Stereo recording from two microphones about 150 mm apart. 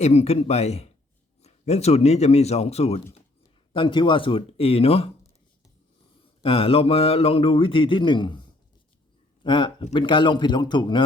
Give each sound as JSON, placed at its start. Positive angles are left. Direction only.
{"t": 0.0, "sound": "a man's voice", "side_deg": 45}
{"t": 3.7, "sound": "a man's voice", "side_deg": 35}
{"t": 6.4, "sound": "a man's voice", "side_deg": 40}
{"t": 9.4, "sound": "a man's voice", "side_deg": 30}